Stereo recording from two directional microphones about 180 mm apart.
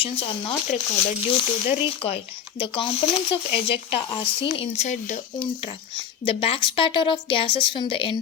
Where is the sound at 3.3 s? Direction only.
30° left (ahead or behind).